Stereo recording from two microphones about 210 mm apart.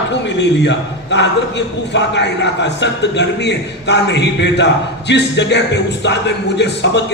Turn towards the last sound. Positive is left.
turn(degrees=55)  # may be behind; listen again after turning